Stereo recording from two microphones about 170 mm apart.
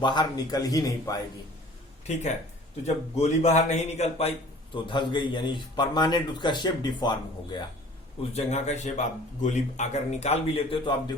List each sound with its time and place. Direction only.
0.0 s a man's voice: 25° left (ahead or behind)
2.8 s a man's voice: 40° left (ahead or behind); by 7.6 s 25° left (ahead or behind)
8.2 s a man's voice: 40° left (ahead or behind)